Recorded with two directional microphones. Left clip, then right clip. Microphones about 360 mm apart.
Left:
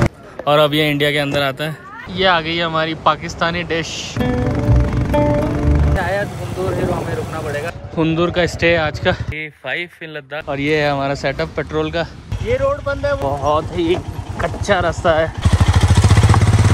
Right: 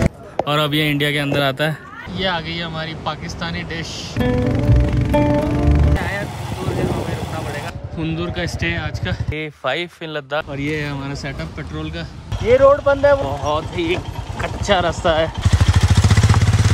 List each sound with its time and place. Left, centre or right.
0.0 s speech: centre
7.4 s speech: centre
12.4 s speech: right
13.3 s speech: centre
15.5 s vehicle: centre